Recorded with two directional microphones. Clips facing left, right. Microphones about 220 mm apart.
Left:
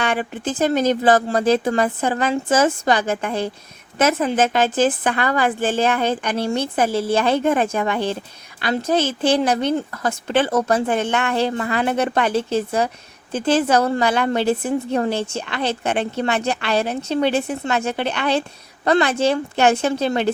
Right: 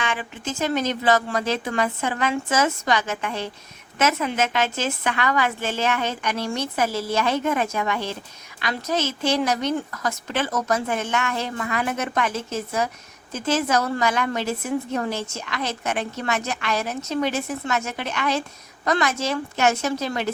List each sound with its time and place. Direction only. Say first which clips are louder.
0.0 s a woman's voice: left 6 dB; 35° left (ahead or behind)